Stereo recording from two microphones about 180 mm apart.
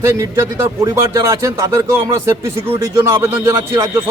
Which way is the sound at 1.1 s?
15° right (ahead or behind).